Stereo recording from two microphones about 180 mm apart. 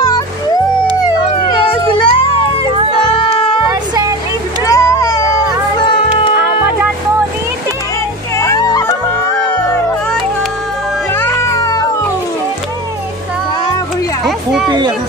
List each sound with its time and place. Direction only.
1.5 s music: 30° left (ahead or behind)
2.9 s cat: 30° left (ahead or behind)
4.6 s a sound: 20° left (ahead or behind)
5.8 s music: 30° left (ahead or behind)
8.4 s music: 20° left (ahead or behind)
11.1 s music: 15° left (ahead or behind)
14.2 s children playing: centre (ahead or behind)